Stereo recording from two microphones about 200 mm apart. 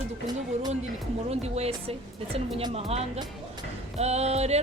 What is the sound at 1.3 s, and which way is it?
Music, 30° right (ahead or behind).